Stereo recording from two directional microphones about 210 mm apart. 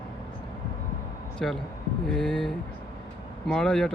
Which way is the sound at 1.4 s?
Centre (ahead or behind).